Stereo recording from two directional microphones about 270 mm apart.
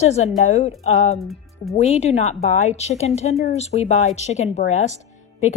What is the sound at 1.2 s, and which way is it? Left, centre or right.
Speech, centre.